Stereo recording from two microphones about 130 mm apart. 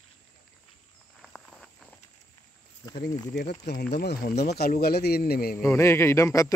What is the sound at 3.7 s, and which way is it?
Speech, 90° left.